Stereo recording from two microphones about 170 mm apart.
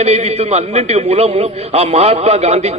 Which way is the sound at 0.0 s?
40° right (ahead or behind).